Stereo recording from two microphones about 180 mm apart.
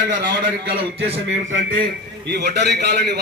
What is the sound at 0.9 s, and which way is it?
Speech, 75° right (ahead or behind).